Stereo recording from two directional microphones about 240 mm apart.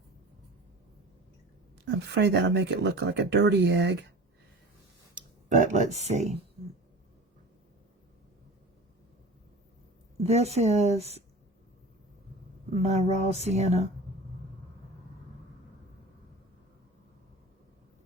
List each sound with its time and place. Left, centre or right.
1.8 s speech: right
5.1 s speech: right
10.2 s speech: right
12.7 s speech: right